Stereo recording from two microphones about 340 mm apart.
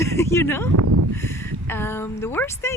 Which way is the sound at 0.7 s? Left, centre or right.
Right.